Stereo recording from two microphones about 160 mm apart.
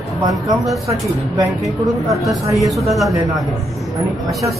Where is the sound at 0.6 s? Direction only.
Centre (ahead or behind).